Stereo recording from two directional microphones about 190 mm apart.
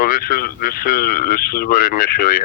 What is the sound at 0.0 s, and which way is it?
Speech, 50° left (ahead or behind).